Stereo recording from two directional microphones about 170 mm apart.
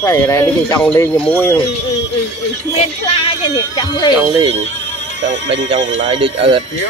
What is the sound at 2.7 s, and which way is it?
Speech, 35° left (ahead or behind).